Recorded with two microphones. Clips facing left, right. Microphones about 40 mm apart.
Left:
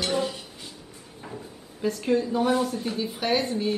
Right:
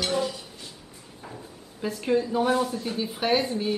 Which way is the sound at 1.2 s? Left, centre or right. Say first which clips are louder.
Left 3 dB; centre.